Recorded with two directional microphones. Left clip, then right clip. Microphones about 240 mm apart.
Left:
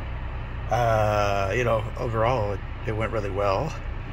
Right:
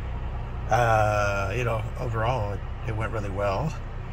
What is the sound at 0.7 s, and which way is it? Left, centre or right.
Speech, centre.